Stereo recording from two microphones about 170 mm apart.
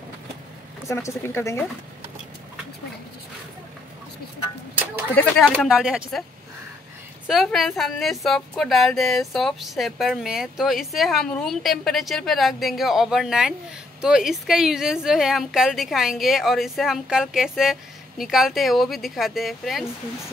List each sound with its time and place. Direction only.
0.8 s speech: 15° left (ahead or behind)
5.1 s a woman's voice: 5° left (ahead or behind)
5.7 s a woman's voice: 5° right (ahead or behind)
7.2 s a woman's voice: centre (ahead or behind)